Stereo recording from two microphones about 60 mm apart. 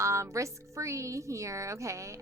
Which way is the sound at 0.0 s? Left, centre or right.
Right.